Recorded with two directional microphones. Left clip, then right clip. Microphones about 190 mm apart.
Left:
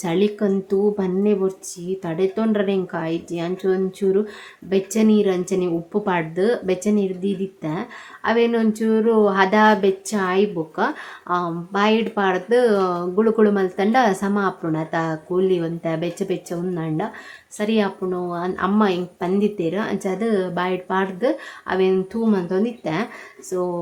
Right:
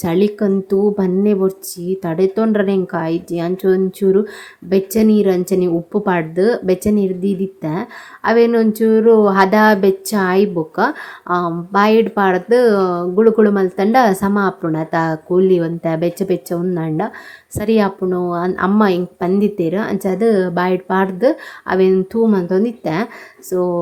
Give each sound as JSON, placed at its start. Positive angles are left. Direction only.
{"t": 0.0, "sound": "speech", "side_deg": -20}